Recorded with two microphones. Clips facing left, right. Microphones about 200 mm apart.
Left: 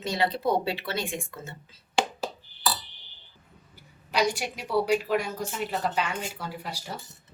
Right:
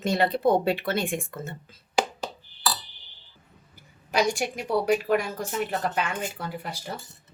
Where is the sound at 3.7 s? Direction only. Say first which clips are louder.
Right 2 dB; 50° right (ahead or behind).